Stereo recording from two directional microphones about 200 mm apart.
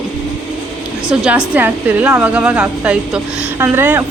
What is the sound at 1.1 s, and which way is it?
A woman's voice, 5° right (ahead or behind).